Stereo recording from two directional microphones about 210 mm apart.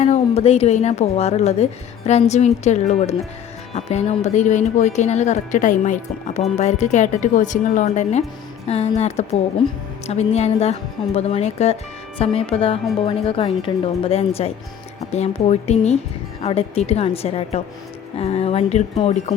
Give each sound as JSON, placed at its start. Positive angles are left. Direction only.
{"t": 0.0, "sound": "speech", "side_deg": 30}
{"t": 8.6, "sound": "music", "side_deg": 30}
{"t": 9.0, "sound": "a woman's voice", "side_deg": 30}